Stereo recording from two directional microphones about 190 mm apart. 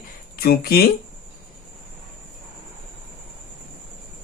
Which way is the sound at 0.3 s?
55° left (ahead or behind).